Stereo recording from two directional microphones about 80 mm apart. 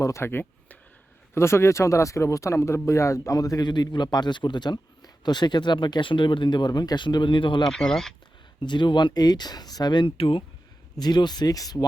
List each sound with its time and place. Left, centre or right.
0.0 s speech: left
3.7 s speech: left
7.7 s speech: centre
8.6 s speech: left
10.9 s speech: left